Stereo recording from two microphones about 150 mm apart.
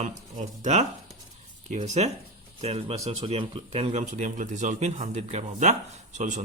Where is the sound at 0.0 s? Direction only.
50° right (ahead or behind).